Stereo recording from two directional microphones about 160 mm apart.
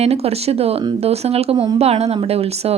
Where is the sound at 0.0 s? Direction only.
40° right (ahead or behind).